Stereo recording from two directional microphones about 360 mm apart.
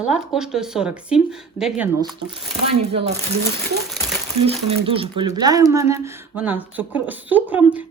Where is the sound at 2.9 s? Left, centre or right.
Centre.